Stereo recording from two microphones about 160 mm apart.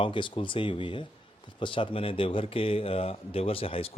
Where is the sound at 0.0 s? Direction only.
30° left (ahead or behind).